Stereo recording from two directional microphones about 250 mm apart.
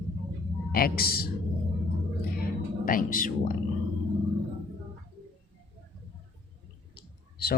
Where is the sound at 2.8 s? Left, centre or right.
Left.